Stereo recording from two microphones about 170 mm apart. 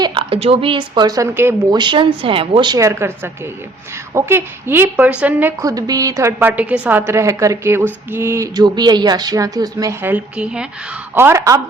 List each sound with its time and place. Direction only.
0.0 s speech: 30° right (ahead or behind)
1.8 s speech: 30° right (ahead or behind)
4.1 s a woman's voice: 15° right (ahead or behind)